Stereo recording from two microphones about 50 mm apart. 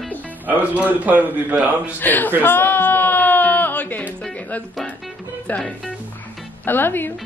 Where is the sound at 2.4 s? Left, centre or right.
Left.